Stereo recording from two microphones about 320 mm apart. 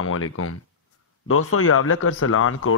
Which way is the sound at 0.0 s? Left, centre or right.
Left.